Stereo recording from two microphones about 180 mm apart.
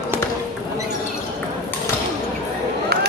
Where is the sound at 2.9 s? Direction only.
65° right (ahead or behind).